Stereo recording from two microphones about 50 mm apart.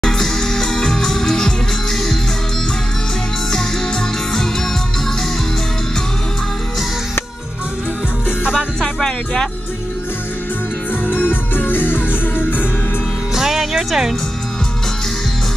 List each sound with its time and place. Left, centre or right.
0.0 s music: centre
8.5 s music: centre
11.1 s music: left
13.3 s music: centre